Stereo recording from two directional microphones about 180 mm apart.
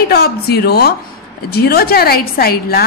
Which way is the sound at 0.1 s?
60° left (ahead or behind).